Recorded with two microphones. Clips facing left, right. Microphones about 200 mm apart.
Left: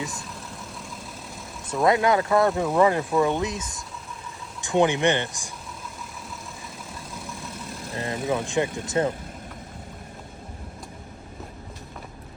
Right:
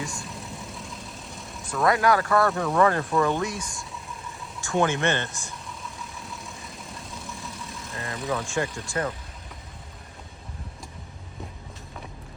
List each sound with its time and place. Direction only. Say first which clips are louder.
0.0 s vehicle: left 1 dB; centre (ahead or behind)
1.7 s speech: left 2 dB; 20° left (ahead or behind)
7.2 s vehicle: left 3 dB; centre (ahead or behind)
7.8 s vehicle: left 6 dB; 30° left (ahead or behind)
8.3 s speech: left 3 dB; 20° left (ahead or behind)